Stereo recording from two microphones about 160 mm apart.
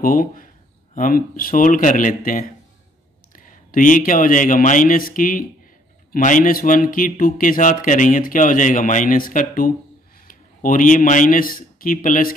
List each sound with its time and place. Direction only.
0.0 s a man's voice: 60° left (ahead or behind)